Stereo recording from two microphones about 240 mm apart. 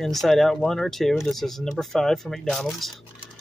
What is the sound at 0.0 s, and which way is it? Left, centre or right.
Speech, centre.